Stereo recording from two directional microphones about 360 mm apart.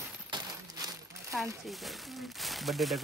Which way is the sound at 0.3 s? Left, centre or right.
Centre.